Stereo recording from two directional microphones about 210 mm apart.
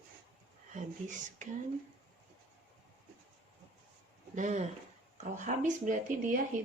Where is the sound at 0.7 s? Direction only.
35° right (ahead or behind).